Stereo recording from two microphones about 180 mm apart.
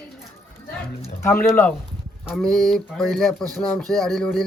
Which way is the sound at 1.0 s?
10° left (ahead or behind).